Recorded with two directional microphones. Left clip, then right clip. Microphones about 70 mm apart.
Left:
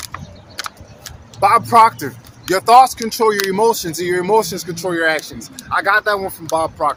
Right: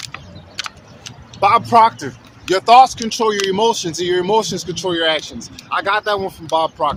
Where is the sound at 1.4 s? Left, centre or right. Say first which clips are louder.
Left 1 dB; right.